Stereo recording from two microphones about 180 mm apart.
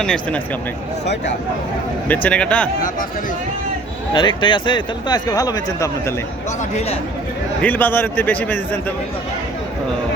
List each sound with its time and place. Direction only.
0.0 s speech: 5° left (ahead or behind)
1.0 s speech: 70° left (ahead or behind)
2.0 s a man's voice: 10° left (ahead or behind)
4.1 s speech: 25° left (ahead or behind)
6.7 s speech: 35° left (ahead or behind)
7.6 s a man's voice: 10° left (ahead or behind)